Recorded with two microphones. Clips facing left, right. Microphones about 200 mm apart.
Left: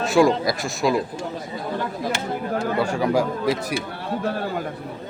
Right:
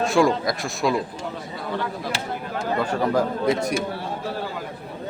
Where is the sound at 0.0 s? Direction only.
Centre (ahead or behind).